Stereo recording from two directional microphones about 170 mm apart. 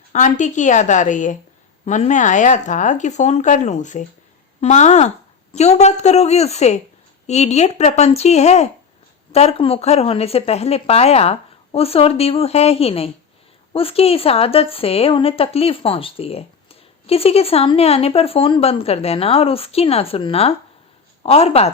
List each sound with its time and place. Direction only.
0.1 s a woman's voice: 45° left (ahead or behind)